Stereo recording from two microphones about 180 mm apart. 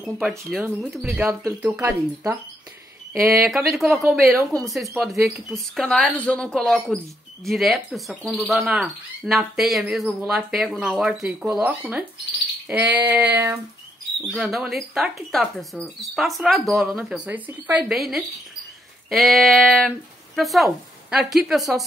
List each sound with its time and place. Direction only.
0.0 s speech: centre (ahead or behind)
1.0 s speech: 15° right (ahead or behind)
3.7 s speech: centre (ahead or behind)
14.2 s speech: centre (ahead or behind)